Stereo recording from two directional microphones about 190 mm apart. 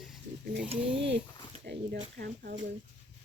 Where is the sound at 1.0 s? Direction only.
70° right (ahead or behind).